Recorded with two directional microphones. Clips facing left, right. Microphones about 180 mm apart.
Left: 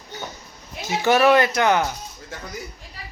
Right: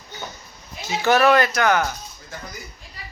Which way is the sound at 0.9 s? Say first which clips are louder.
Even; 15° left (ahead or behind).